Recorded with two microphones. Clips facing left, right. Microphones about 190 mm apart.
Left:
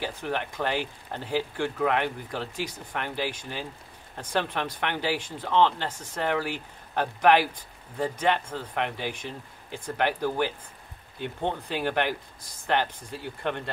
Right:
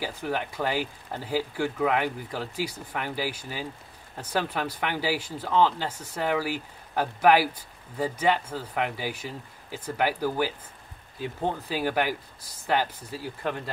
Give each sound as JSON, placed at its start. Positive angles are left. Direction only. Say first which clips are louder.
{"t": 0.0, "sound": "speech", "louder": "right 1 dB", "side_deg": -10}